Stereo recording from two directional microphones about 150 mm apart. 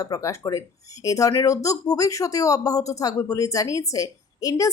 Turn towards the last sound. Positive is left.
turn(degrees=25)  # may be behind; listen again after turning